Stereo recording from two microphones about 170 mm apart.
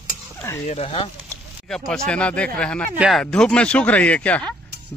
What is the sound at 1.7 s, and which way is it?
A man's voice, 5° left (ahead or behind).